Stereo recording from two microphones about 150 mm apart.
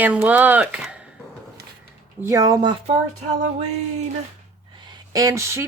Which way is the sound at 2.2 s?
20° right (ahead or behind).